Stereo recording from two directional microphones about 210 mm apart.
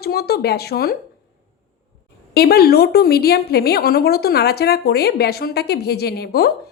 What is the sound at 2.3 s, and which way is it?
Speech, 50° left (ahead or behind).